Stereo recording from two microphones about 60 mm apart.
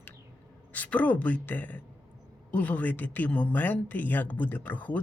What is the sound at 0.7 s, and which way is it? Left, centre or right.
Speech, left.